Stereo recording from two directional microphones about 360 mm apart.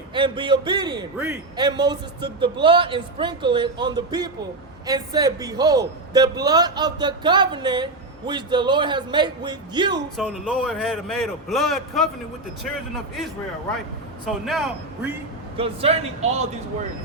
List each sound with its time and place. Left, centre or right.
0.1 s a man's voice: centre
14.3 s a man's voice: centre
15.5 s a man's voice: centre